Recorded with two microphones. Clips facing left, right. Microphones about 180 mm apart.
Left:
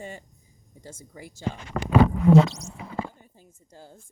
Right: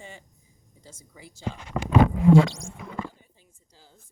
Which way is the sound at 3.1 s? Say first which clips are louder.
Left 6 dB; 50° left (ahead or behind).